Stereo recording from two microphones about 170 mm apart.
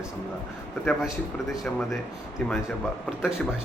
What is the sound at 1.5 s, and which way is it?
Speech, centre (ahead or behind).